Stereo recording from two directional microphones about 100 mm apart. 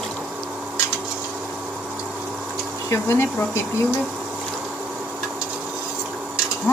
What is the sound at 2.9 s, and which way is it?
Speech, 25° left (ahead or behind).